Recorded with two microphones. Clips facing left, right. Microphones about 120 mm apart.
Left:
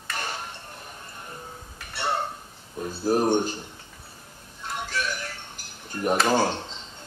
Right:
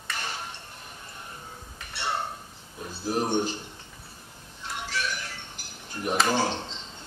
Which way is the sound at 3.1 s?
45° left (ahead or behind).